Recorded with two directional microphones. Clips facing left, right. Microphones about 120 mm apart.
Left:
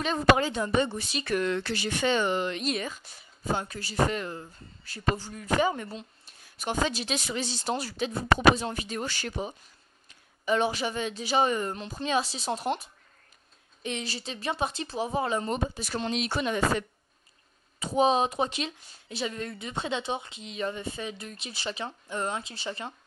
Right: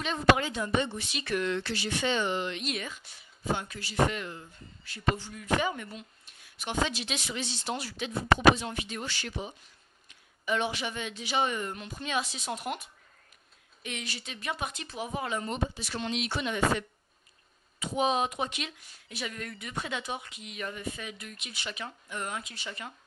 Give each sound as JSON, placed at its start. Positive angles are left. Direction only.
{"t": 0.0, "sound": "speech", "side_deg": 40}